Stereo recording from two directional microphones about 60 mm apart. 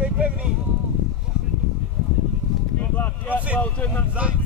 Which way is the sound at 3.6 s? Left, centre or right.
Left.